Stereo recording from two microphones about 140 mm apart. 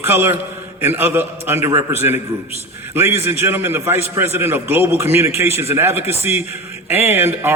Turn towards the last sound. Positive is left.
turn(degrees=-15)  # may be behind; listen again after turning